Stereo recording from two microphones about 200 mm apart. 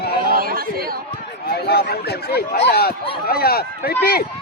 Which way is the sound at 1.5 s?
50° left (ahead or behind).